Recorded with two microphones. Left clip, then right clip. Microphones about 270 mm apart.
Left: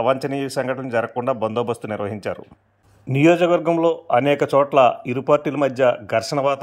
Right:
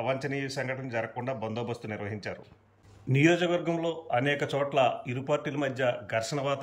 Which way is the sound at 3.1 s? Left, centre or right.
Centre.